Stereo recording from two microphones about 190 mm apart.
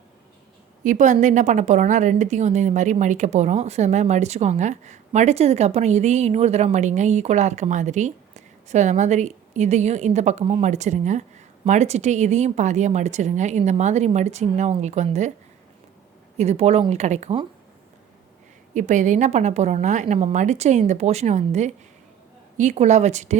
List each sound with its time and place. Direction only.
0.9 s a woman's voice: 40° right (ahead or behind)
16.4 s a woman's voice: 35° right (ahead or behind)
18.7 s a woman's voice: 40° right (ahead or behind)